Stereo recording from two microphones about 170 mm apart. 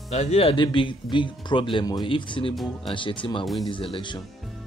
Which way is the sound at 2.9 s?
30° left (ahead or behind).